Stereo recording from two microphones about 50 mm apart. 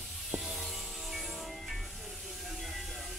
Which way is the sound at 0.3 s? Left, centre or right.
Centre.